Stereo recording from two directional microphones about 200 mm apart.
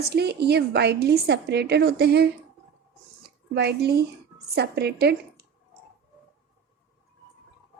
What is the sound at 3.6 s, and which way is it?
A woman's voice, 55° right (ahead or behind).